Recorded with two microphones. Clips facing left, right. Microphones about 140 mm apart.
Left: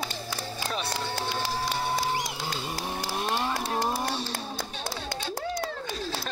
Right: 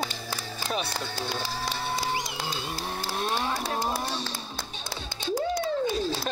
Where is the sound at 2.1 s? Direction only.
5° left (ahead or behind).